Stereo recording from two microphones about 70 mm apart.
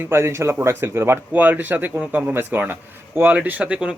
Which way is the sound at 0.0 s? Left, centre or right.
Right.